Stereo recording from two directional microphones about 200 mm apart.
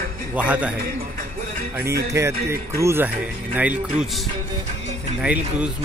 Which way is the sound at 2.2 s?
15° right (ahead or behind).